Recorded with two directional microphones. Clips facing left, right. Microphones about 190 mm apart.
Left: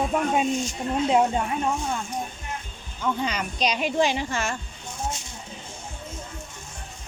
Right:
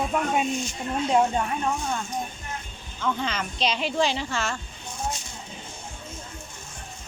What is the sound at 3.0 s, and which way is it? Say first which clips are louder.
Speech: left 1 dB; 10° left (ahead or behind).